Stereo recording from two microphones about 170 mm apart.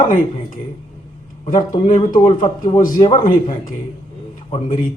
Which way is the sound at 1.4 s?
50° left (ahead or behind).